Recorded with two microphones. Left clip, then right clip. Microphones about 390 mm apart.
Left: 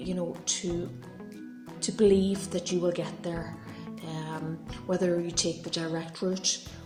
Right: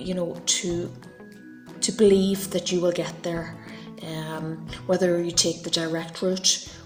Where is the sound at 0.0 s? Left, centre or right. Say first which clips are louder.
Right 5 dB; left.